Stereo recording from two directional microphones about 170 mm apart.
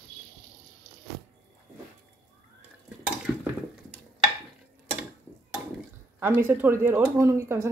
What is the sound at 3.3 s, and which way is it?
Dishes, 10° right (ahead or behind).